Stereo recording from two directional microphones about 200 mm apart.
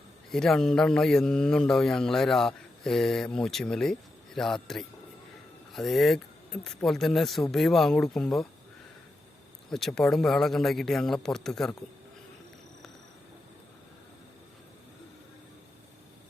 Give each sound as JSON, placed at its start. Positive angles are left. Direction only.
{"t": 0.3, "sound": "speech", "side_deg": 0}
{"t": 9.6, "sound": "speech", "side_deg": 0}